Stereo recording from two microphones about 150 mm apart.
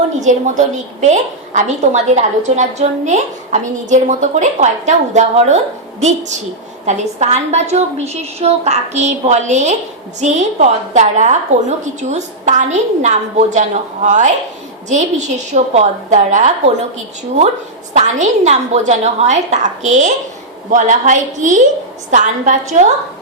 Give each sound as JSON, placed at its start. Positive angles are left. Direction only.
{"t": 0.2, "sound": "a woman's voice", "side_deg": -55}
{"t": 17.9, "sound": "a woman's voice", "side_deg": -50}